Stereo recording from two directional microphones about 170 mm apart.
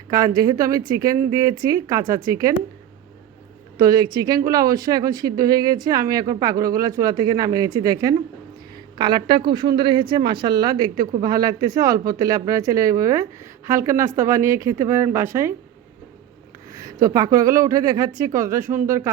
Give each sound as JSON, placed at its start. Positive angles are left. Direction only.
{"t": 0.1, "sound": "speech", "side_deg": -20}
{"t": 3.8, "sound": "speech", "side_deg": -20}
{"t": 16.7, "sound": "speech", "side_deg": -20}